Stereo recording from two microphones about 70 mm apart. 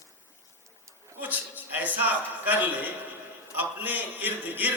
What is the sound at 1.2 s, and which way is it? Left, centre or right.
A man's voice, right.